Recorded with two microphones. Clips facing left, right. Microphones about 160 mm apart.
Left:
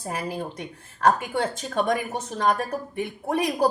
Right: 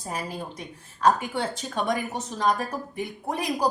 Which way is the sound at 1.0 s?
50° left (ahead or behind).